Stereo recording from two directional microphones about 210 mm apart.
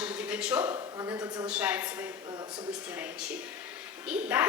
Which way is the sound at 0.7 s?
15° right (ahead or behind).